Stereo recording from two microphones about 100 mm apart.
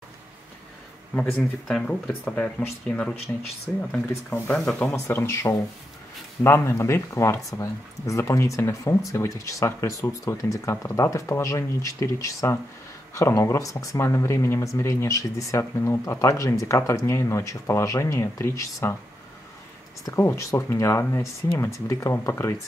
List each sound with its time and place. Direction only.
1.2 s speech: 5° left (ahead or behind)
4.8 s speech: 25° left (ahead or behind)
20.1 s speech: 30° left (ahead or behind)